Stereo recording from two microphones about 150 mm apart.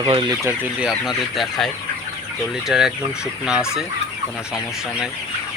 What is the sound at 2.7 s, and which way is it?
Speech, 5° right (ahead or behind).